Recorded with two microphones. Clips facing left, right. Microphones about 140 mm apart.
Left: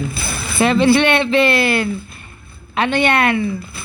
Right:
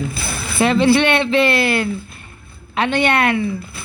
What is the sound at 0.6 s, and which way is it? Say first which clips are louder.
Speech: left 1 dB; 55° left (ahead or behind).